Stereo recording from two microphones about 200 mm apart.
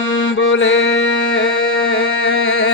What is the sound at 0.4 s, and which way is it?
Mantra, 70° left (ahead or behind).